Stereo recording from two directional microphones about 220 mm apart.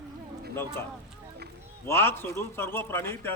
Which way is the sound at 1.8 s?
10° left (ahead or behind).